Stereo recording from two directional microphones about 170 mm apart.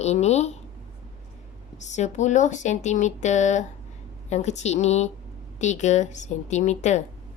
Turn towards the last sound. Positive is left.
turn(degrees=45)  # may be behind; listen again after turning